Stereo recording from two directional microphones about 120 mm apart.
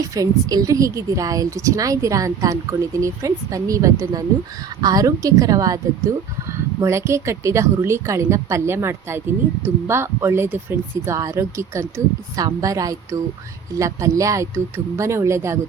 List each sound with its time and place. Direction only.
0.1 s a woman's voice: 30° right (ahead or behind)